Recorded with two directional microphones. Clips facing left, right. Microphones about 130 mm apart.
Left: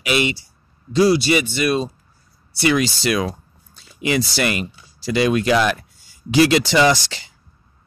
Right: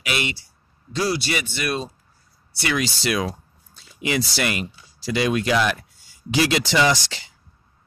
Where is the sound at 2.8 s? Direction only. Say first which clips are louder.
Left 4 dB; 55° left (ahead or behind).